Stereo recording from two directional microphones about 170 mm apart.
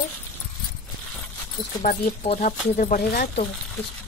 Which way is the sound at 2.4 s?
55° left (ahead or behind).